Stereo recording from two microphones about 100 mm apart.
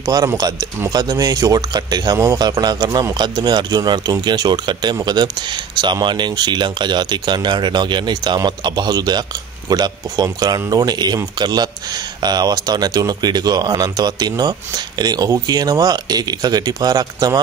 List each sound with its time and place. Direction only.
0.0 s speech: 35° right (ahead or behind)